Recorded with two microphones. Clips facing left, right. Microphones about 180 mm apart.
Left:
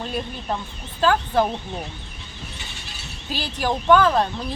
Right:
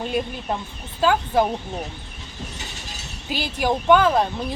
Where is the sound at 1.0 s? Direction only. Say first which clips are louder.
Even; 10° right (ahead or behind).